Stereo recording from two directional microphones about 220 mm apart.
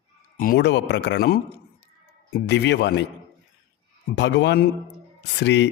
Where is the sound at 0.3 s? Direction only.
40° left (ahead or behind).